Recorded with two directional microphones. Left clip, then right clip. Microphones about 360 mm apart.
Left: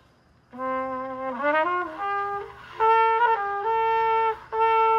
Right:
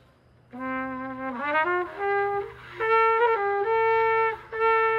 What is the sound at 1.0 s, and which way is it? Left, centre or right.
Trumpet, centre.